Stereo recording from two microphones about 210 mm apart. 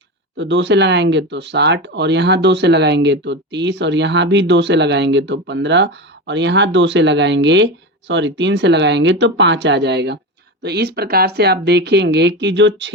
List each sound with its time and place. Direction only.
0.3 s speech: 55° right (ahead or behind)